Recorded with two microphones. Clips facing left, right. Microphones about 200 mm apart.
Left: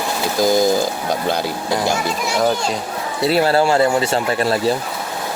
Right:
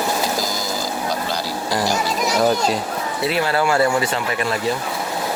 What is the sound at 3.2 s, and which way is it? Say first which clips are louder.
Speech: left 5 dB; 35° left (ahead or behind).